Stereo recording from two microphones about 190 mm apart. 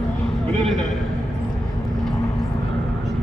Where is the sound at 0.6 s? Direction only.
Centre (ahead or behind).